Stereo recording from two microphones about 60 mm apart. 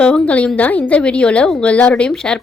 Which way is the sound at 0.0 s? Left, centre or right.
Left.